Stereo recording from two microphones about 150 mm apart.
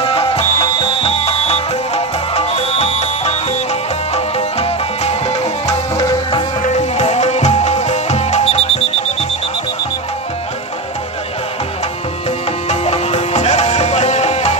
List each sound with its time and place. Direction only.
0.0 s music: 40° left (ahead or behind)
5.9 s music: 25° left (ahead or behind)
6.6 s music: 50° left (ahead or behind)
12.6 s music: 45° left (ahead or behind)